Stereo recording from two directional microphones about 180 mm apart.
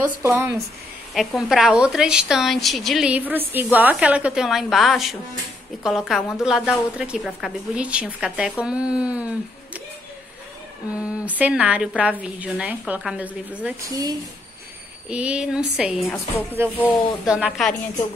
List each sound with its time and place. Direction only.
0.2 s a woman's voice: 15° right (ahead or behind)
1.1 s a woman's voice: centre (ahead or behind)
11.0 s a woman's voice: 5° right (ahead or behind)
13.8 s speech: 20° right (ahead or behind)
15.0 s a woman's voice: 5° right (ahead or behind)